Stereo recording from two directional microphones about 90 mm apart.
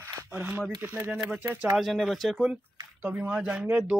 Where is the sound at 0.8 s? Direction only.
25° right (ahead or behind).